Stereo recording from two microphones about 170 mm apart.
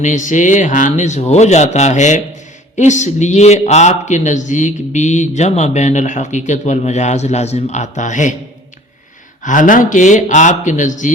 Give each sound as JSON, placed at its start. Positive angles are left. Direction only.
{"t": 0.0, "sound": "a man's voice", "side_deg": 45}
{"t": 9.4, "sound": "a man's voice", "side_deg": 50}